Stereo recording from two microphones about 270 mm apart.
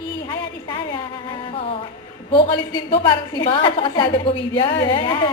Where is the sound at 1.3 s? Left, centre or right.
Centre.